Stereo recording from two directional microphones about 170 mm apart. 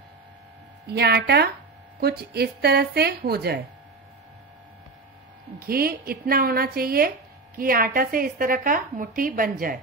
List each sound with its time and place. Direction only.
0.8 s a woman's voice: 75° right (ahead or behind)
5.6 s a woman's voice: 60° right (ahead or behind)